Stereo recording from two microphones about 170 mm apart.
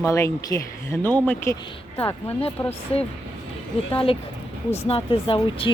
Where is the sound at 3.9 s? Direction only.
30° left (ahead or behind).